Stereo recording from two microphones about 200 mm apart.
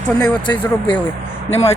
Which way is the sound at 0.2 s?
20° left (ahead or behind).